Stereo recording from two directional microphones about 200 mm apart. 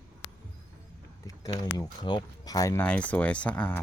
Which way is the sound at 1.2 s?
15° left (ahead or behind).